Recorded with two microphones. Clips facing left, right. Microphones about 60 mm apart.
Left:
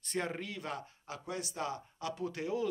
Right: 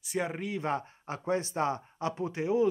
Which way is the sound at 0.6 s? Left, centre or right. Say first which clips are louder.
Right 9 dB; right.